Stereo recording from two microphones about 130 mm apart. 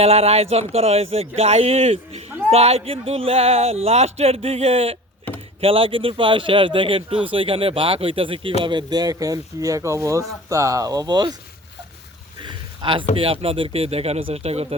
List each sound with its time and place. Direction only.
0.0 s a man's voice: 50° right (ahead or behind); by 11.3 s 30° right (ahead or behind)
12.5 s a sound: 40° right (ahead or behind)
13.1 s a man's voice: 45° right (ahead or behind)